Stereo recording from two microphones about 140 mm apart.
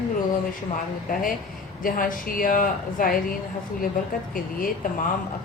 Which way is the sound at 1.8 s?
90° left.